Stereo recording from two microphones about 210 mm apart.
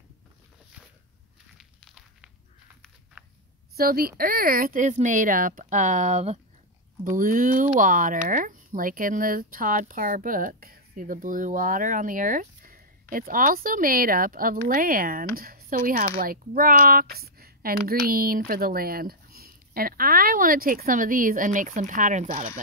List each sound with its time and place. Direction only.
1.6 s walk: centre (ahead or behind)
3.7 s speech: 45° right (ahead or behind)